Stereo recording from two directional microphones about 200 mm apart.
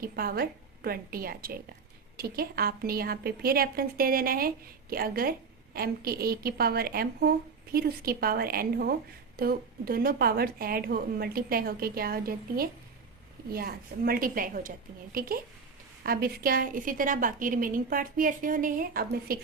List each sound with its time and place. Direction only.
0.0 s a woman's voice: 50° right (ahead or behind)